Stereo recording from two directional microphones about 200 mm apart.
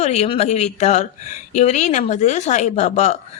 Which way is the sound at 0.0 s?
35° left (ahead or behind).